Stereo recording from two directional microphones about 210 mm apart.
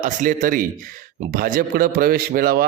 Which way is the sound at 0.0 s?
40° right (ahead or behind).